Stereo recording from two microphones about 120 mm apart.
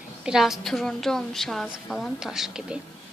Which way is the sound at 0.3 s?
5° right (ahead or behind).